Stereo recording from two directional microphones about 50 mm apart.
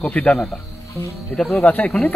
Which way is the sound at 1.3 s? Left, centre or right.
Centre.